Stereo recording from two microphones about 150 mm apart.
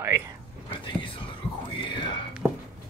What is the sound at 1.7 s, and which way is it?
Whispering, 35° left (ahead or behind).